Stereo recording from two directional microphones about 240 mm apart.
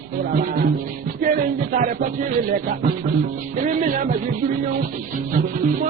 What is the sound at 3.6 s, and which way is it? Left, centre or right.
Music, right.